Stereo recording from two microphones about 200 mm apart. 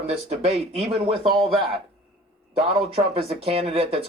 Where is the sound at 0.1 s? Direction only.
30° right (ahead or behind).